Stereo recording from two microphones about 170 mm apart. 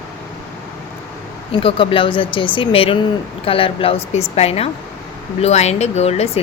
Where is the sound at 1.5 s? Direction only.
30° left (ahead or behind).